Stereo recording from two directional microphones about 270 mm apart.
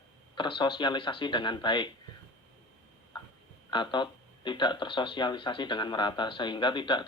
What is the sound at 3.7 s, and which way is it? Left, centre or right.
A man's voice, centre.